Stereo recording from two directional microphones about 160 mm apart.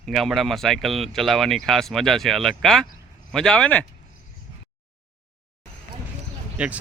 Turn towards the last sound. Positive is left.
turn(degrees=-10)  # may be behind; listen again after turning